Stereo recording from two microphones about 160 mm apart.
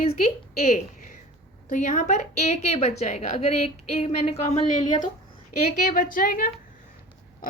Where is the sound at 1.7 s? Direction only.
55° left (ahead or behind).